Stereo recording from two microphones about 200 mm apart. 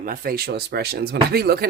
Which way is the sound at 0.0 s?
45° right (ahead or behind).